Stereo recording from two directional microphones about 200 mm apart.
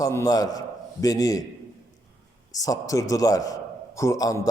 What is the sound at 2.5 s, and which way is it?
A man's voice, 15° left (ahead or behind).